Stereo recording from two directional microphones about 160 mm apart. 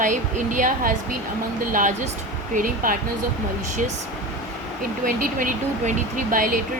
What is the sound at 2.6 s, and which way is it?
Speech, 60° right (ahead or behind).